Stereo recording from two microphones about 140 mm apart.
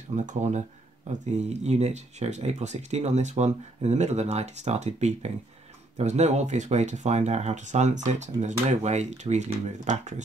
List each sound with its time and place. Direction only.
0.1 s speech: 55° right (ahead or behind)